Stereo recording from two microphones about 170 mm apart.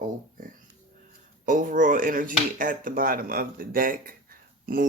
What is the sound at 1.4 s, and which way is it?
Speech, 50° right (ahead or behind).